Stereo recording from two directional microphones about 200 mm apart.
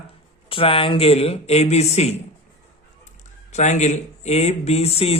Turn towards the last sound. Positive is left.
turn(degrees=30)  # may be behind; listen again after turning